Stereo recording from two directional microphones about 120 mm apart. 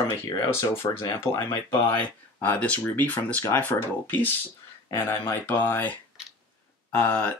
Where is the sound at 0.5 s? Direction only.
20° left (ahead or behind).